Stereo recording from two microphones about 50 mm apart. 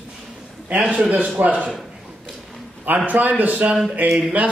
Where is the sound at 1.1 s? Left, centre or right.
Right.